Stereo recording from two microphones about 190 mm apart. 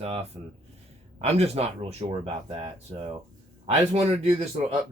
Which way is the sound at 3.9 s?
35° right (ahead or behind).